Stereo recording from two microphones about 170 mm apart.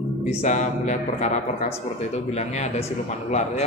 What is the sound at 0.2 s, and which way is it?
A man's voice, 45° left (ahead or behind).